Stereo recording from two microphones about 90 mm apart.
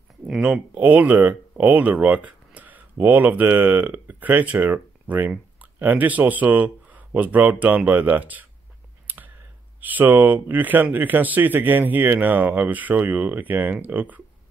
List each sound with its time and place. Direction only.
0.4 s speech: 15° right (ahead or behind)
9.0 s clicking: 20° right (ahead or behind)
9.8 s speech: 20° right (ahead or behind)